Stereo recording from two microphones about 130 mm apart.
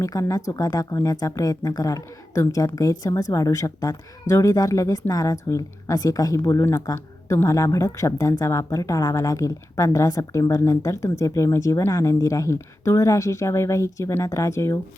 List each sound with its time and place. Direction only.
0.0 s speech: 25° left (ahead or behind)